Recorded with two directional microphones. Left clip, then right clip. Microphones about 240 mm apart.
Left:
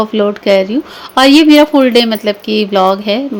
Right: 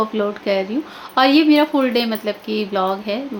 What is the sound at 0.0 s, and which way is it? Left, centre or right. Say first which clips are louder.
Speech: left 8 dB; left.